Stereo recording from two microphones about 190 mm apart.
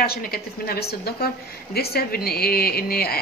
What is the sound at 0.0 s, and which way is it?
A woman's voice, 55° left (ahead or behind).